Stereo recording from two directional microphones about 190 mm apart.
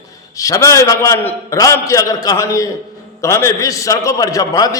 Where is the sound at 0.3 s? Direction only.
15° left (ahead or behind).